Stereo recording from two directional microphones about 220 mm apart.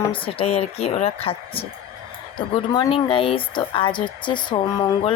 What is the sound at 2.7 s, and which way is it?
Speech, 20° left (ahead or behind).